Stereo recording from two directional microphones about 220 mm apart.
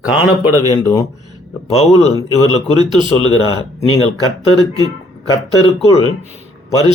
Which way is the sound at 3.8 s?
75° left (ahead or behind).